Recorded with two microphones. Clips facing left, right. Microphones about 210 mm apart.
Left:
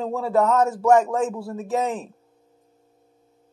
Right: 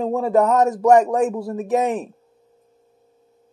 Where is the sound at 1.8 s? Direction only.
20° right (ahead or behind).